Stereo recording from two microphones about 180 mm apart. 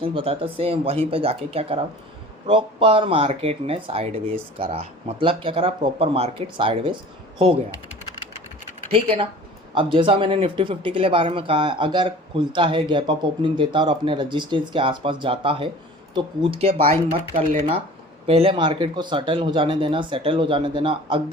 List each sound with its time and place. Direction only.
0.0 s speech: 30° right (ahead or behind)
8.9 s speech: 35° right (ahead or behind)